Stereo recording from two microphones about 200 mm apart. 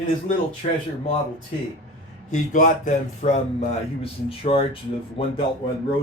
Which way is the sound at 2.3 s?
40° left (ahead or behind).